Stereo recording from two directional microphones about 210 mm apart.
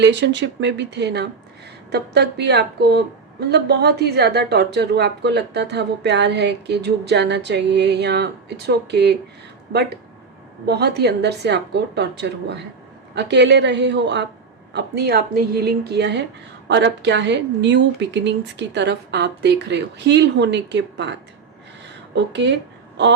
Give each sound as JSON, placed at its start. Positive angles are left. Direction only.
{"t": 0.0, "sound": "speech", "side_deg": -55}
{"t": 10.7, "sound": "speech", "side_deg": -50}